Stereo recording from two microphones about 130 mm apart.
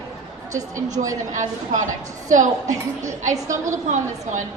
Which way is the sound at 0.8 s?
70° right (ahead or behind).